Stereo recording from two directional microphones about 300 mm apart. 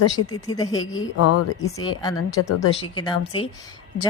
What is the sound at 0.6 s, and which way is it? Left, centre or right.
A woman's voice, left.